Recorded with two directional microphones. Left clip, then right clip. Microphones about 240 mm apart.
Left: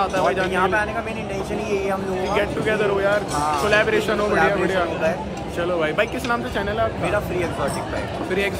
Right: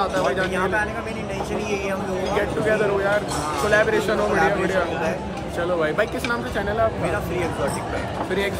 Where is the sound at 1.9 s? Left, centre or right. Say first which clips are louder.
Left 2 dB; centre.